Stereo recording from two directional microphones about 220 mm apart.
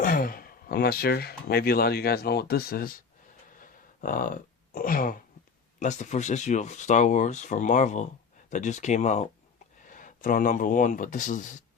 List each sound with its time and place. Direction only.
0.0 s speech: 40° left (ahead or behind)
3.6 s a sound: 40° left (ahead or behind)
5.8 s speech: 35° left (ahead or behind)